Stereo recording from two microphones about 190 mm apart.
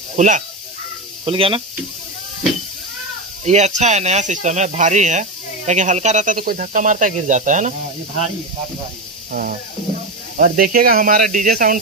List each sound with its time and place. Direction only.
0.2 s speech: 40° right (ahead or behind)
1.2 s speech: 30° right (ahead or behind)
3.4 s speech: 35° right (ahead or behind)
10.3 s speech: 45° right (ahead or behind)